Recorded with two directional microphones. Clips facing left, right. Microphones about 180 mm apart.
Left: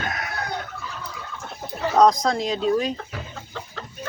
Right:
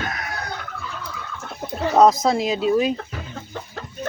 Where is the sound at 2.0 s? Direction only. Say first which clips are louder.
Right 2 dB; 5° right (ahead or behind).